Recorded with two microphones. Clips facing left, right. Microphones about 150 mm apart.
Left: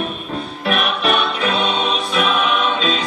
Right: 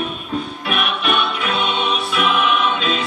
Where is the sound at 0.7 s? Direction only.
35° left (ahead or behind).